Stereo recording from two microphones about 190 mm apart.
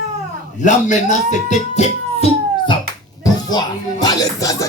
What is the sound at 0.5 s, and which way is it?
Speech, 40° left (ahead or behind).